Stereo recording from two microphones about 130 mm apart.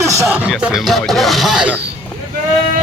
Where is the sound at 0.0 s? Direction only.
25° right (ahead or behind).